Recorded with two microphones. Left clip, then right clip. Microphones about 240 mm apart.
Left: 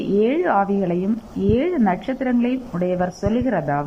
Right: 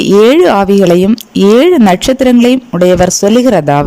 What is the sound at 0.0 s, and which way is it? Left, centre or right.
A woman's voice, right.